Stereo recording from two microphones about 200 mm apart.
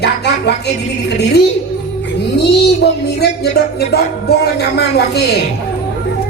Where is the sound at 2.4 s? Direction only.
55° left (ahead or behind).